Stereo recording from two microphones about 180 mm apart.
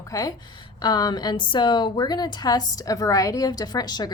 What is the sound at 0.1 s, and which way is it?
Speech, 20° left (ahead or behind).